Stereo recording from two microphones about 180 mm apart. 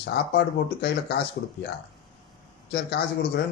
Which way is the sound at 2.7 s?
65° left (ahead or behind).